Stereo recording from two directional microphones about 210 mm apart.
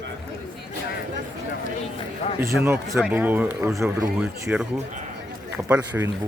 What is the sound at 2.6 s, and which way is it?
Speech, 10° right (ahead or behind).